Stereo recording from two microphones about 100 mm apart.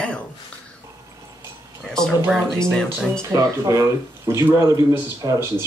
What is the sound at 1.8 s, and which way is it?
Speech, 5° left (ahead or behind).